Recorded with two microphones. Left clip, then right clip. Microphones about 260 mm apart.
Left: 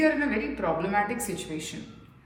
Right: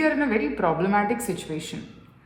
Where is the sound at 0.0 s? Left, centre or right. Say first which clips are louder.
Right 2 dB; centre.